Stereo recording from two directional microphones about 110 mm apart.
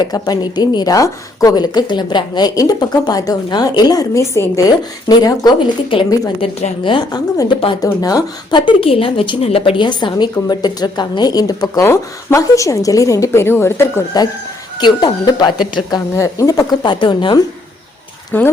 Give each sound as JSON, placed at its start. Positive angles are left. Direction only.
{"t": 0.0, "sound": "a woman's voice", "side_deg": 40}
{"t": 5.0, "sound": "a woman's voice", "side_deg": 35}
{"t": 6.4, "sound": "a woman's voice", "side_deg": 80}
{"t": 6.8, "sound": "a woman's voice", "side_deg": 45}
{"t": 14.8, "sound": "a woman's voice", "side_deg": 40}
{"t": 16.1, "sound": "a woman's voice", "side_deg": 30}
{"t": 16.8, "sound": "a woman's voice", "side_deg": 45}
{"t": 18.3, "sound": "speech", "side_deg": 15}